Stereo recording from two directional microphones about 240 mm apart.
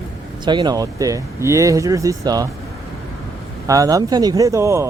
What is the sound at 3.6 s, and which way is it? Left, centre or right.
Speech, centre.